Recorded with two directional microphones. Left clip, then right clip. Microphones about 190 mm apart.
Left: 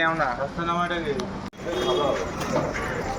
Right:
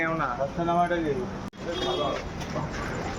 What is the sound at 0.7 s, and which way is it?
Speech, centre (ahead or behind).